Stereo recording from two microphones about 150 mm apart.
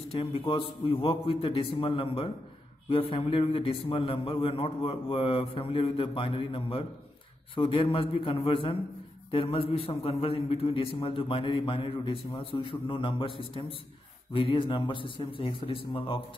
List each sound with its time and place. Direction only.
0.1 s a man's voice: 40° left (ahead or behind)